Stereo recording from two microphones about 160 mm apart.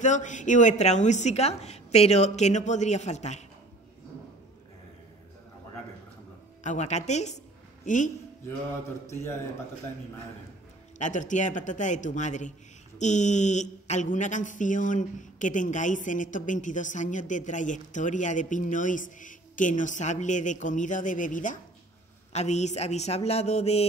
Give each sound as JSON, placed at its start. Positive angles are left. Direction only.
{"t": 0.0, "sound": "mantra", "side_deg": 50}
{"t": 6.6, "sound": "mantra", "side_deg": 45}
{"t": 7.8, "sound": "a woman's voice", "side_deg": 50}
{"t": 9.0, "sound": "a man's voice", "side_deg": 15}
{"t": 11.0, "sound": "mantra", "side_deg": 50}